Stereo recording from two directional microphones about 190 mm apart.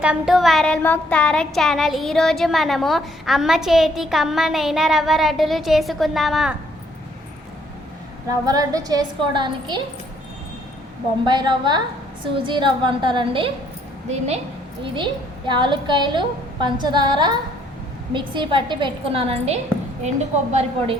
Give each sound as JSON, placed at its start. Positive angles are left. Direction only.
{"t": 0.0, "sound": "a sound", "side_deg": -5}
{"t": 8.4, "sound": "a woman's voice", "side_deg": -20}
{"t": 11.3, "sound": "a woman's voice", "side_deg": -25}
{"t": 14.9, "sound": "a woman's voice", "side_deg": -25}